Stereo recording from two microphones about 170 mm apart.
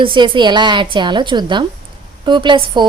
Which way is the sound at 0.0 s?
30° right (ahead or behind).